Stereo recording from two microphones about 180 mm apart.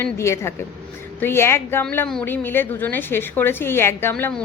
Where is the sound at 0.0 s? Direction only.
15° left (ahead or behind).